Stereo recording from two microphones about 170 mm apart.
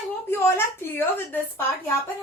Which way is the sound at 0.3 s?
15° left (ahead or behind).